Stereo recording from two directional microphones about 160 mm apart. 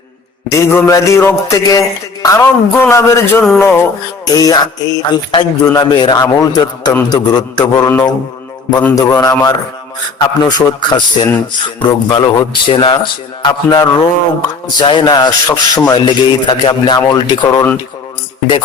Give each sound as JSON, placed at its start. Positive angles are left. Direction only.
{"t": 0.5, "sound": "a man's voice", "side_deg": 15}